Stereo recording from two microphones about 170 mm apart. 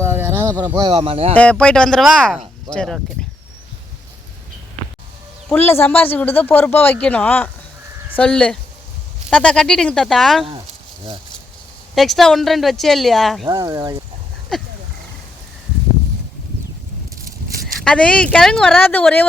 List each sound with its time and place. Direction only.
0.1 s a sound: 15° right (ahead or behind)
0.6 s speech: 25° right (ahead or behind)
1.4 s speech: 5° left (ahead or behind)
5.5 s speech: 10° left (ahead or behind)
11.9 s speech: centre (ahead or behind)
13.4 s speech: 25° right (ahead or behind)
17.8 s speech: 5° left (ahead or behind)